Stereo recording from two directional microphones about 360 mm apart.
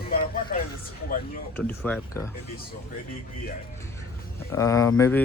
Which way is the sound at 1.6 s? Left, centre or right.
Centre.